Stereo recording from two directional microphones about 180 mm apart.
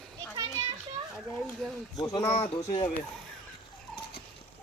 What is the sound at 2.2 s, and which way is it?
Speech, 35° left (ahead or behind).